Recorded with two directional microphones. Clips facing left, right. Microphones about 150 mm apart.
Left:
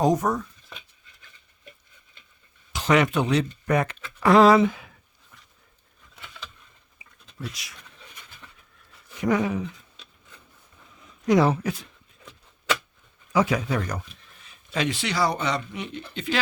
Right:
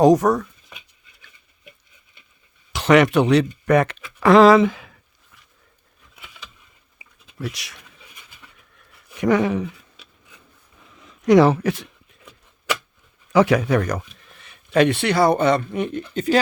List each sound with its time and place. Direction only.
0.0 s speech: 85° right
2.7 s speech: 75° right (ahead or behind)
4.2 s speech: 90° right
6.1 s vehicle: 10° right (ahead or behind)
7.3 s speech: 75° right (ahead or behind)
9.2 s speech: 80° right
11.0 s speech: 85° right
13.3 s speech: 75° right (ahead or behind); by 16.4 s 40° right (ahead or behind)